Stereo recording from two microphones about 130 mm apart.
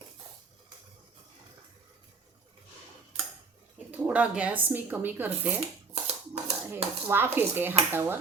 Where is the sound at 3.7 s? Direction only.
10° right (ahead or behind).